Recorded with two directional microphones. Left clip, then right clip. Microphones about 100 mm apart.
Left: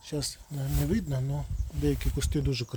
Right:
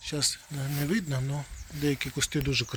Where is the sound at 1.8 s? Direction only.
30° left (ahead or behind).